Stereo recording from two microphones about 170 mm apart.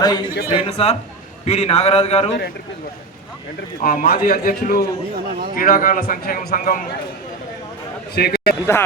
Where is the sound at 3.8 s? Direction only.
55° left (ahead or behind).